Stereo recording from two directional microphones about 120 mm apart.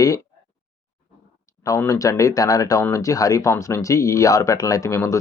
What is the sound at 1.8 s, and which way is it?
Speech, 25° left (ahead or behind).